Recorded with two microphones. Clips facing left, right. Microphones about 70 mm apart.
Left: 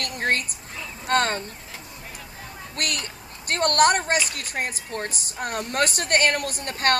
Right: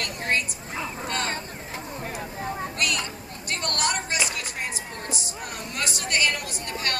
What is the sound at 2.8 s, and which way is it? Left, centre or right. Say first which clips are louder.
A woman's voice: left 1 dB; left.